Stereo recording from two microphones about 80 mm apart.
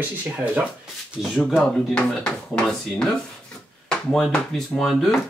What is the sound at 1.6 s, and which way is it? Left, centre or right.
Speech, centre.